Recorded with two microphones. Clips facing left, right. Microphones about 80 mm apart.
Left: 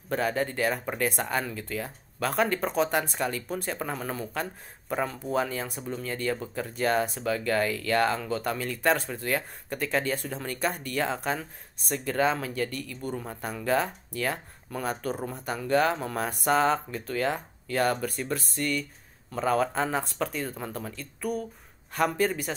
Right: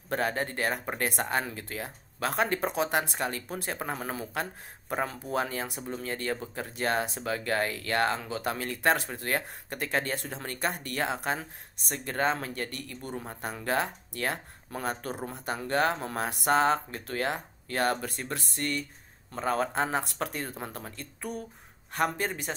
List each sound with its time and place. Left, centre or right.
0.1 s speech: right
13.1 s speech: right
13.7 s speech: right
14.7 s speech: right